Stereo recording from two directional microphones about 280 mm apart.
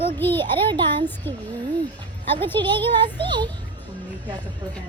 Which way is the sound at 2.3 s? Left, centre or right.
Centre.